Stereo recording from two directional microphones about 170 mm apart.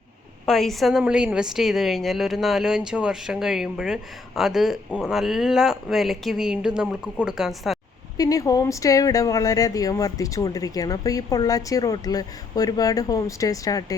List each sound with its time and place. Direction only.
0.4 s a woman's voice: centre (ahead or behind)
8.2 s speech: 20° left (ahead or behind)